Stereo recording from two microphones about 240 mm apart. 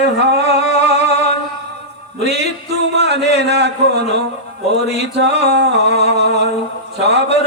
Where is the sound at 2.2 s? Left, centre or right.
Right.